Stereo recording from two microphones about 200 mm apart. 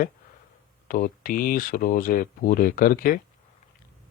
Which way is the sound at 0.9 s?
45° left (ahead or behind).